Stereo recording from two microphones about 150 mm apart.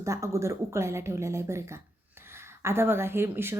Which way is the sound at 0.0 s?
20° right (ahead or behind).